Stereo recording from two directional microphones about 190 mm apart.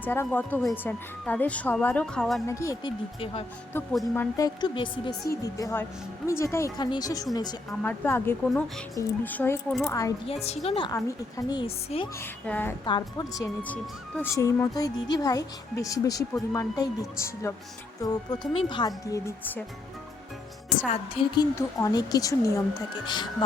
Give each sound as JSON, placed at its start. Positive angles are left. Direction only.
{"t": 0.0, "sound": "speech", "side_deg": 10}
{"t": 2.5, "sound": "speech", "side_deg": 15}
{"t": 4.1, "sound": "a woman's voice", "side_deg": 15}
{"t": 9.9, "sound": "speech", "side_deg": 15}
{"t": 10.4, "sound": "a woman's voice", "side_deg": 35}
{"t": 12.2, "sound": "speech", "side_deg": 10}
{"t": 12.8, "sound": "a woman's voice", "side_deg": 20}
{"t": 20.9, "sound": "a woman's voice", "side_deg": 25}
{"t": 21.5, "sound": "a woman's voice", "side_deg": 15}